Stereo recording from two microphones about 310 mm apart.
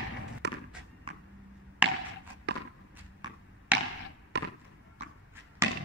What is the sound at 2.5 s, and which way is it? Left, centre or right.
Walk, right.